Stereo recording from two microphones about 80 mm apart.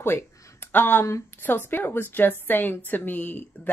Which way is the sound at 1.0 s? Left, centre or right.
Left.